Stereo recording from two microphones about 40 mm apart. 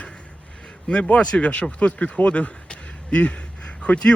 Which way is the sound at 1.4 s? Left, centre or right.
Left.